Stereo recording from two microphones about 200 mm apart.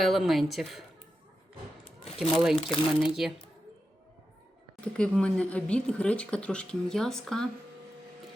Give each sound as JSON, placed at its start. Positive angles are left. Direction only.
{"t": 0.0, "sound": "speech", "side_deg": 0}
{"t": 2.1, "sound": "speech", "side_deg": 0}
{"t": 2.6, "sound": "speech", "side_deg": 25}
{"t": 3.0, "sound": "speech", "side_deg": -5}
{"t": 4.8, "sound": "speech", "side_deg": 5}